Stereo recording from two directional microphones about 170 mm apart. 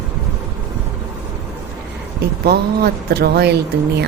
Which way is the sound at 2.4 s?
70° right (ahead or behind).